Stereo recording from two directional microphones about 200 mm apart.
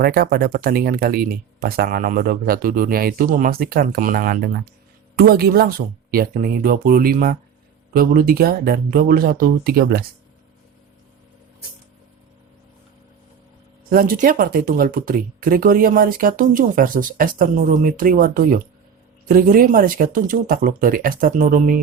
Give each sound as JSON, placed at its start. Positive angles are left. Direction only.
{"t": 0.0, "sound": "speech", "side_deg": -50}
{"t": 13.9, "sound": "speech", "side_deg": -45}